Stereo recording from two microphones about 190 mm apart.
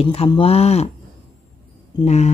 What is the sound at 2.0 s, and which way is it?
Speech, 35° left (ahead or behind).